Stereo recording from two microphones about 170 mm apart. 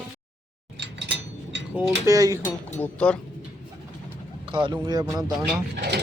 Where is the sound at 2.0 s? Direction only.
20° right (ahead or behind).